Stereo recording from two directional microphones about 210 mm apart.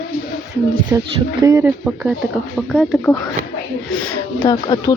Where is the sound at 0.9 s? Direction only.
20° right (ahead or behind); by 3.0 s centre (ahead or behind).